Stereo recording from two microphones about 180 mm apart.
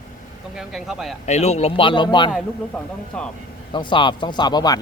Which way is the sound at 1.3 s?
35° left (ahead or behind).